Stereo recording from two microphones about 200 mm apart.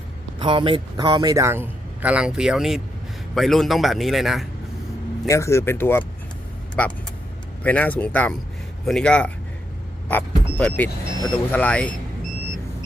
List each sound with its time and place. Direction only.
0.3 s a man's voice: 25° right (ahead or behind); by 4.4 s centre (ahead or behind)
5.3 s speech: 15° left (ahead or behind)
7.6 s a man's voice: 10° left (ahead or behind)